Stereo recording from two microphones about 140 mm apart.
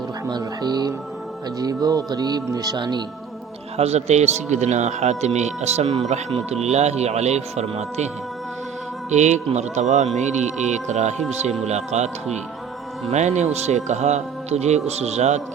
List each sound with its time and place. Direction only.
0.3 s speech: 30° right (ahead or behind)
3.8 s speech: 50° right (ahead or behind)